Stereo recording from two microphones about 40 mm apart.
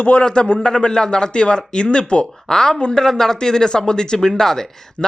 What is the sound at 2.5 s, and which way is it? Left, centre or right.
Speech, centre.